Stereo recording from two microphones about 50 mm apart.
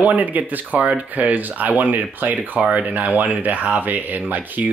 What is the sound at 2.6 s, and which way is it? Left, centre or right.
Speech, right.